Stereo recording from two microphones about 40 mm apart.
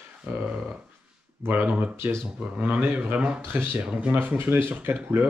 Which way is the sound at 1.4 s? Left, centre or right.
Right.